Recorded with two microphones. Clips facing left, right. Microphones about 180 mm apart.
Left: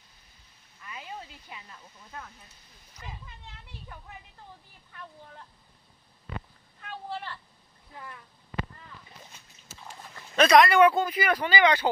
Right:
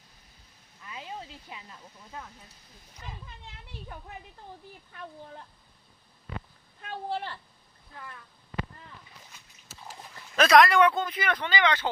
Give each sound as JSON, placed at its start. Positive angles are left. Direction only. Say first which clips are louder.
{"t": 0.8, "sound": "a sound", "louder": "right 1 dB", "side_deg": -25}
{"t": 2.0, "sound": "speech", "louder": "right 1 dB", "side_deg": -10}
{"t": 9.7, "sound": "speech", "louder": "even", "side_deg": 0}